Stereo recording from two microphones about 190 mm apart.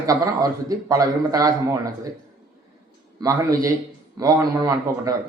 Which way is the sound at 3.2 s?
20° right (ahead or behind).